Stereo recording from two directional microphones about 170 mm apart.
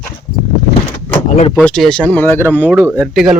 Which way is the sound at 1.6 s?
5° left (ahead or behind).